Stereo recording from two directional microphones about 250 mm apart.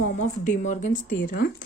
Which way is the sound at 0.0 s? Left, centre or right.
Left.